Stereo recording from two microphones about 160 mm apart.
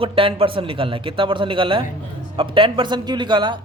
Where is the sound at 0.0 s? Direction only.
35° right (ahead or behind).